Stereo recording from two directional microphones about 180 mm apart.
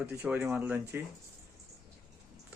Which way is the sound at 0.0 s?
10° right (ahead or behind).